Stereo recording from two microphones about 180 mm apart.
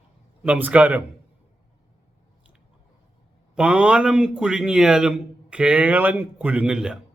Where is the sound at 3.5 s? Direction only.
5° right (ahead or behind).